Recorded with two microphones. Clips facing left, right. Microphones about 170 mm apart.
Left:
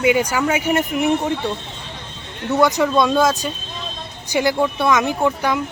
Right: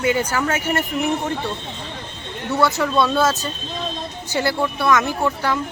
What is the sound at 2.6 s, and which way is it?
Speech, 15° left (ahead or behind).